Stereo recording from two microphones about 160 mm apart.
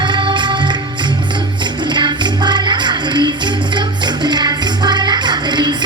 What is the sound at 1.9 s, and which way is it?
Music, 30° right (ahead or behind).